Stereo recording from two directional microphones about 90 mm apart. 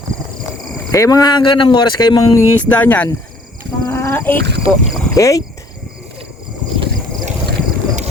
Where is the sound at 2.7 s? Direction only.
15° left (ahead or behind).